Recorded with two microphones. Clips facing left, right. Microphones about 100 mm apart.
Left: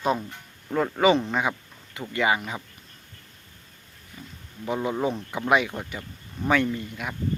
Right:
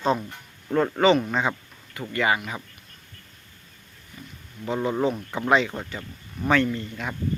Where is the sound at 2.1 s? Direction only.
20° left (ahead or behind).